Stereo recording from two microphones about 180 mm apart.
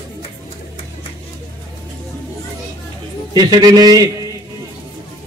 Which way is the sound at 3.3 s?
25° right (ahead or behind).